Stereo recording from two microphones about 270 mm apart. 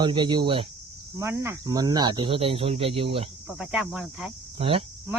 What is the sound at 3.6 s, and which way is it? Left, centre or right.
Speech, centre.